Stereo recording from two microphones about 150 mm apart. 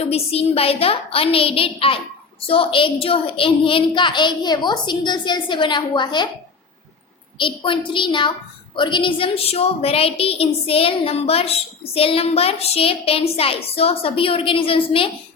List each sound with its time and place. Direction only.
0.0 s a woman's voice: 40° left (ahead or behind)
7.3 s a woman's voice: 35° left (ahead or behind)